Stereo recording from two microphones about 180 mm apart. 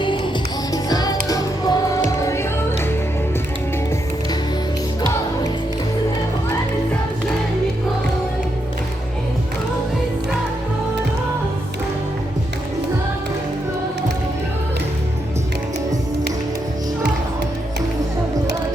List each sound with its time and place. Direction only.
0.7 s music: 20° left (ahead or behind)